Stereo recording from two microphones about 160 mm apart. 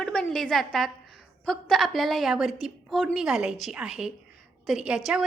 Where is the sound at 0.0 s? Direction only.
5° left (ahead or behind).